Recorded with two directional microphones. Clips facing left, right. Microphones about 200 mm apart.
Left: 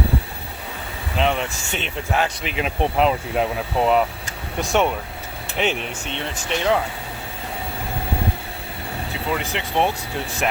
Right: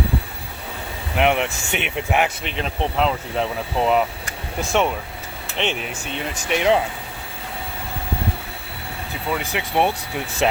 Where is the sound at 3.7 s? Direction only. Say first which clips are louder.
Left 1 dB; centre (ahead or behind); by 6.8 s 15° right (ahead or behind).